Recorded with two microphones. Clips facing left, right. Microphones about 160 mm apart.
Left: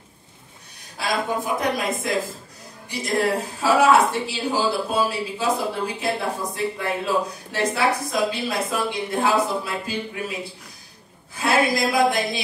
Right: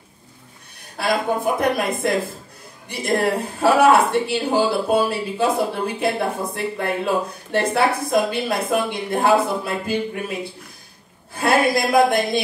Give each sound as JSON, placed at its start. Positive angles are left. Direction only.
{"t": 0.9, "sound": "a woman's voice", "side_deg": -55}
{"t": 11.3, "sound": "a woman's voice", "side_deg": -55}